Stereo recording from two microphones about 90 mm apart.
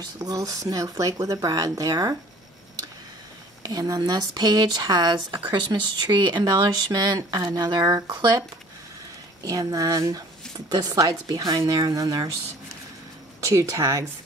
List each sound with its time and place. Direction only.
0.0 s speech: 45° right (ahead or behind)
3.6 s speech: 45° right (ahead or behind)
9.4 s a woman's voice: 40° right (ahead or behind)
13.4 s a woman's voice: 35° right (ahead or behind)